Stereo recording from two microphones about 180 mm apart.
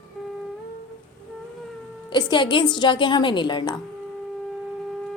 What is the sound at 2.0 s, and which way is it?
A woman's voice, 25° left (ahead or behind).